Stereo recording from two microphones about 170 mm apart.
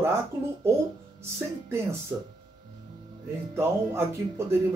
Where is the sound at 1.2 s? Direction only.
15° right (ahead or behind).